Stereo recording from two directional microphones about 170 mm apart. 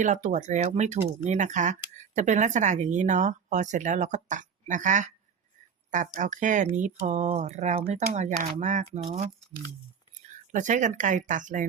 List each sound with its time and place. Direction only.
0.0 s speech: 45° right (ahead or behind)
6.1 s speech: 45° right (ahead or behind)
10.5 s speech: 45° right (ahead or behind)